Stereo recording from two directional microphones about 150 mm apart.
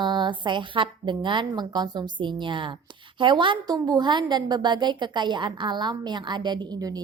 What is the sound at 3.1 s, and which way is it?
A woman's voice, 30° right (ahead or behind).